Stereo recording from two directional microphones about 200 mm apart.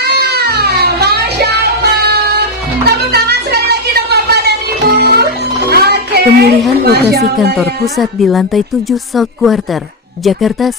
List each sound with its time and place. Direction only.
0.0 s music: 55° right (ahead or behind)
6.8 s speech: 50° right (ahead or behind)
7.5 s speech: centre (ahead or behind)